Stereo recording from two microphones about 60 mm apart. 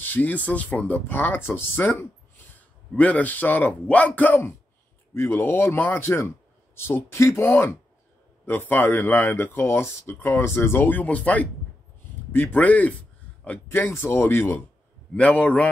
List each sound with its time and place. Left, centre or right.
0.0 s speech: left
8.5 s speech: left
13.7 s speech: left
15.1 s speech: left